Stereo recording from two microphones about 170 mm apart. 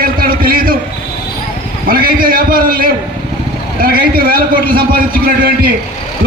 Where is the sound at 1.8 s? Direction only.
60° right (ahead or behind).